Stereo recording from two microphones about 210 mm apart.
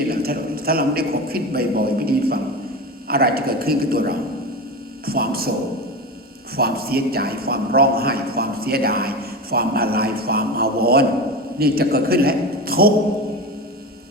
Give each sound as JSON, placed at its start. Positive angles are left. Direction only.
{"t": 0.1, "sound": "a man's voice", "side_deg": -45}
{"t": 6.6, "sound": "a man's voice", "side_deg": -45}